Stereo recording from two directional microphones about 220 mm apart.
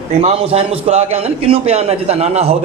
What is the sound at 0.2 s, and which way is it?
A man's voice, 30° right (ahead or behind).